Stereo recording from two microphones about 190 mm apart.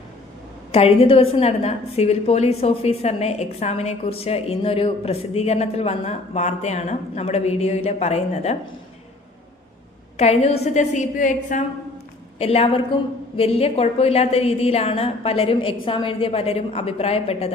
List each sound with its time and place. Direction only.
0.7 s a woman's voice: 30° left (ahead or behind)
10.2 s a woman's voice: 35° left (ahead or behind)
12.4 s a woman's voice: 30° left (ahead or behind)